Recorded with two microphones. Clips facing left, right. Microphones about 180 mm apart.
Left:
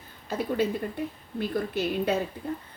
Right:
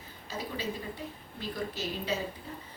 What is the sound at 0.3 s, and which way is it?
A woman's voice, 55° left (ahead or behind).